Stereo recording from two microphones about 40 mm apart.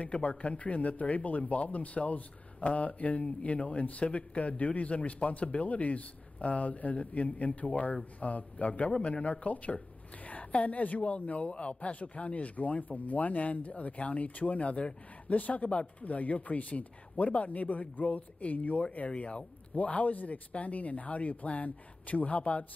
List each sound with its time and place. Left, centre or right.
0.0 s speech: left